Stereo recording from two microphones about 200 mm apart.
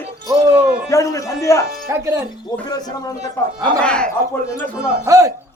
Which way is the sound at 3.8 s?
5° left (ahead or behind).